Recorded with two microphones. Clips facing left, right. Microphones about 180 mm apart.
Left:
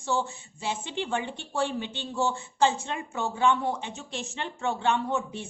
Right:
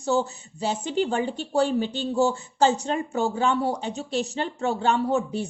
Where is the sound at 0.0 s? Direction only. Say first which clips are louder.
Right 5 dB; 40° right (ahead or behind).